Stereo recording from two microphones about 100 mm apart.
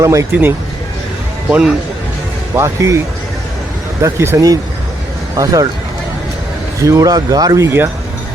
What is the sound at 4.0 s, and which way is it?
Speech, 30° right (ahead or behind).